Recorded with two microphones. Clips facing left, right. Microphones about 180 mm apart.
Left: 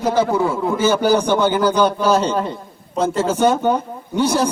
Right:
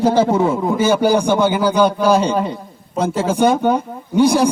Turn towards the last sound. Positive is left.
turn(degrees=-15)  # may be behind; listen again after turning